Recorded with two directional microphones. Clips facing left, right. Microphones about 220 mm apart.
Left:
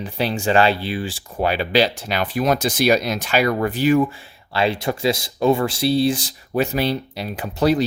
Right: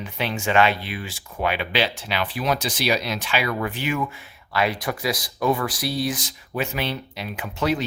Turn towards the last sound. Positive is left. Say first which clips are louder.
# left 6 dB
turn(degrees=35)  # may be behind; listen again after turning